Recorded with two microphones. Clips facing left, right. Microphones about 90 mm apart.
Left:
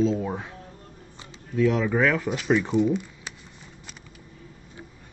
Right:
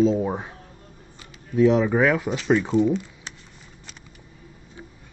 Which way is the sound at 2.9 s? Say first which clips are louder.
Right 2 dB; 10° left (ahead or behind).